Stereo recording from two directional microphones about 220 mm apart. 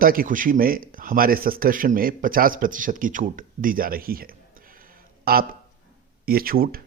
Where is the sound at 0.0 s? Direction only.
40° right (ahead or behind).